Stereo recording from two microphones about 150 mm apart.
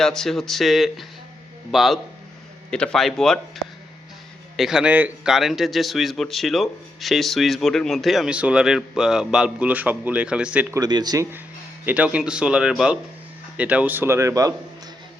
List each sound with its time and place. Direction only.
0.0 s a man's voice: 5° left (ahead or behind)
4.5 s a man's voice: 5° right (ahead or behind)
10.8 s speech: 30° right (ahead or behind)
11.9 s speech: 10° right (ahead or behind)